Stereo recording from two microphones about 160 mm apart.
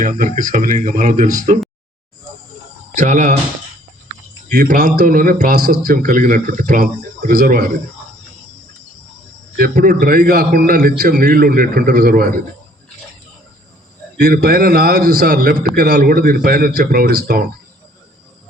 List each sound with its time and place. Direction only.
0.0 s a man's voice: 55° right (ahead or behind)
2.9 s speech: 50° right (ahead or behind)
4.4 s a man's voice: 60° right (ahead or behind)
9.6 s a man's voice: 65° right (ahead or behind)
14.2 s speech: 70° right (ahead or behind)